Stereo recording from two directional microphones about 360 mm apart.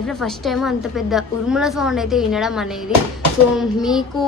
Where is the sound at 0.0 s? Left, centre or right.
Centre.